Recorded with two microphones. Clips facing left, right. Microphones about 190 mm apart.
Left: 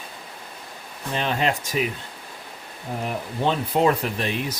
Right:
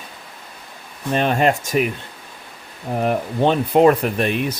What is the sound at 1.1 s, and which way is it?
Speech, 50° right (ahead or behind).